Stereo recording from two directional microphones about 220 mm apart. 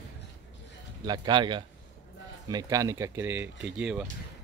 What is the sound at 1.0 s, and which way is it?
Speech, 20° right (ahead or behind).